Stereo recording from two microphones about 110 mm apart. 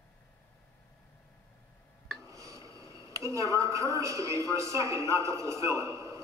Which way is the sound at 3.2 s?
30° right (ahead or behind).